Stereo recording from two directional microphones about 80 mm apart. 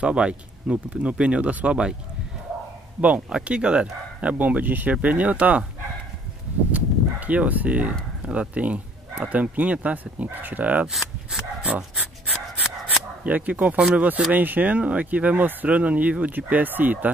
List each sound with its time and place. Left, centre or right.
0.0 s speech: centre
3.0 s speech: centre
6.7 s a sound: centre
8.2 s speech: centre
10.9 s speech: centre
11.6 s a sound: centre
13.2 s speech: centre